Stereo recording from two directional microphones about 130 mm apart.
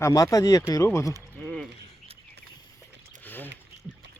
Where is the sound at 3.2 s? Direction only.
15° left (ahead or behind).